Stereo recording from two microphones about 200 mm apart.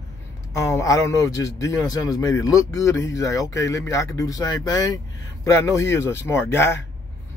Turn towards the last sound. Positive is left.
turn(degrees=10)  # may be behind; listen again after turning